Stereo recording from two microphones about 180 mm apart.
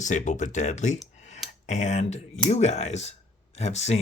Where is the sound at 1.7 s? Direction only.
40° left (ahead or behind).